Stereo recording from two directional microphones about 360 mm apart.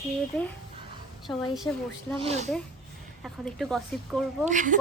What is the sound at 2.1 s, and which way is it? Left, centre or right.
Speech, centre.